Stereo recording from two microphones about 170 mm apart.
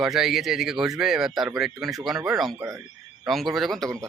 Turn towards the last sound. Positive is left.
turn(degrees=0)  # may be behind; listen again after turning